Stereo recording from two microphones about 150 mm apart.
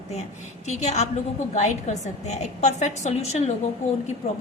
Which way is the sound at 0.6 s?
50° left (ahead or behind).